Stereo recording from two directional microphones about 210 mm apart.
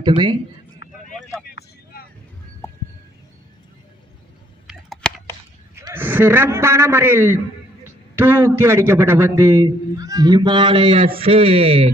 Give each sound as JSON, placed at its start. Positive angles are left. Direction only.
{"t": 0.0, "sound": "speech", "side_deg": -20}
{"t": 0.8, "sound": "vehicle", "side_deg": 60}
{"t": 4.6, "sound": "a sound", "side_deg": 0}
{"t": 5.8, "sound": "a man's voice", "side_deg": -10}